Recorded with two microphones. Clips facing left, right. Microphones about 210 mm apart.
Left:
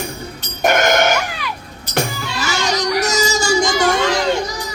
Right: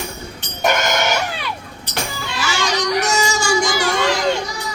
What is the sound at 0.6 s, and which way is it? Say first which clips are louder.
Music: left 4 dB; 50° left (ahead or behind).